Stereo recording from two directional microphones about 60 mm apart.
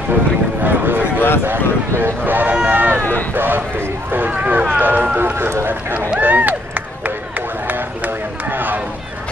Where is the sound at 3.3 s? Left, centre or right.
Right.